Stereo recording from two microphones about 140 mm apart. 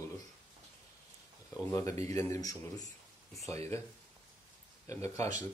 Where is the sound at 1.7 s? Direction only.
20° left (ahead or behind).